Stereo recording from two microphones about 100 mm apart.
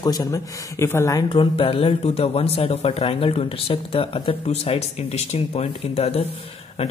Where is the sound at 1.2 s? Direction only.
60° left (ahead or behind).